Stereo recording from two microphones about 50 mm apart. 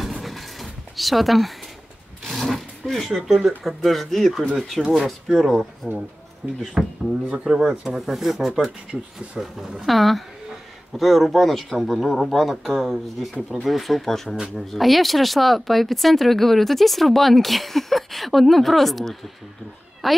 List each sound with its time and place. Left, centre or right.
0.0 s a sound: centre
3.3 s speech: centre
7.2 s speech: centre
8.0 s speech: centre